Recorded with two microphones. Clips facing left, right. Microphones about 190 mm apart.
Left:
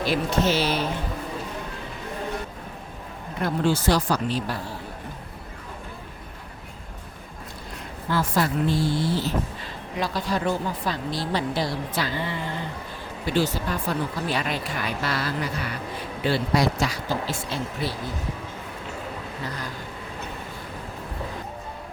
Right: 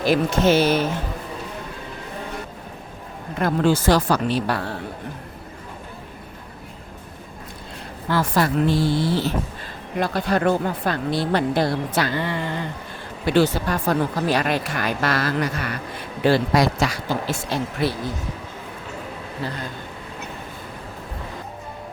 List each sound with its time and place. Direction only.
0.1 s speech: 50° right (ahead or behind)
3.3 s speech: 90° right; by 4.8 s 70° right (ahead or behind)
8.1 s speech: 80° right
9.9 s speech: 55° right (ahead or behind); by 17.3 s 85° right
17.5 s speech: 75° right (ahead or behind)
19.4 s a man's voice: 30° right (ahead or behind)